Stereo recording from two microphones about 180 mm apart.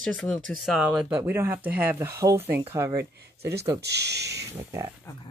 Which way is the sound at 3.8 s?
70° right (ahead or behind).